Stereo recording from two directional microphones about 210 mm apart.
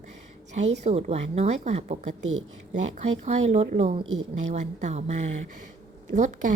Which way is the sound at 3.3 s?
30° right (ahead or behind).